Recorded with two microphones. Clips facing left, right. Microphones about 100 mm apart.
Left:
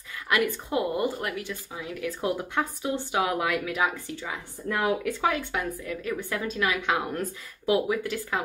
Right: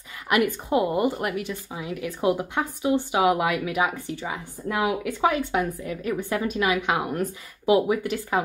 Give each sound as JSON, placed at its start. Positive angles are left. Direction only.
{"t": 0.3, "sound": "a woman's voice", "side_deg": -20}